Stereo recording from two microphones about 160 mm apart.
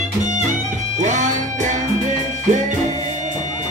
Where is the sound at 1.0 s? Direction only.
50° right (ahead or behind).